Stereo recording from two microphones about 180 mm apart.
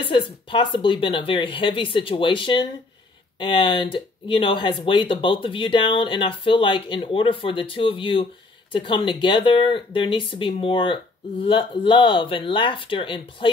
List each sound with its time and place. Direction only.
0.0 s speech: 25° left (ahead or behind)